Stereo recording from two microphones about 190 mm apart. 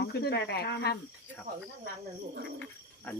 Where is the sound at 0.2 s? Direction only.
60° left (ahead or behind).